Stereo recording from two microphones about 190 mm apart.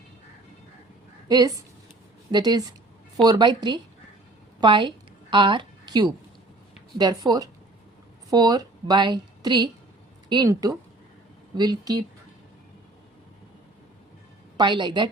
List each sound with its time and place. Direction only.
1.3 s a woman's voice: 20° right (ahead or behind)
14.5 s a woman's voice: 25° right (ahead or behind)